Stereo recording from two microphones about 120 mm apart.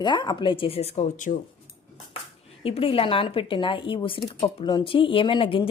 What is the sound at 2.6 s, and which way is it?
Speech, 50° left (ahead or behind).